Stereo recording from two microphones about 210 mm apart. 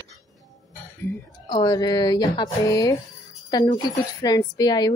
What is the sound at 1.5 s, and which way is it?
Speech, 20° left (ahead or behind).